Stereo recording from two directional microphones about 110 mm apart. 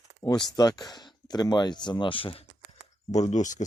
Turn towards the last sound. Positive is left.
turn(degrees=90)